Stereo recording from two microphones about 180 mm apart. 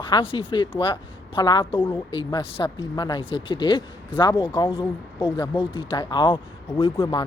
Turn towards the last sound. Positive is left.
turn(degrees=20)  # may be behind; listen again after turning